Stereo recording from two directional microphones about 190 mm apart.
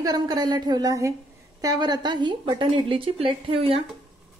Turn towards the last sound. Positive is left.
turn(degrees=-30)  # may be behind; listen again after turning